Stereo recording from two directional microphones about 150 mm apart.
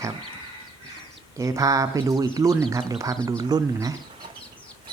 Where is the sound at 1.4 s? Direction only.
20° right (ahead or behind).